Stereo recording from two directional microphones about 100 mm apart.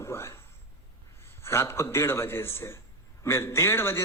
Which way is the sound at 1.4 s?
25° left (ahead or behind).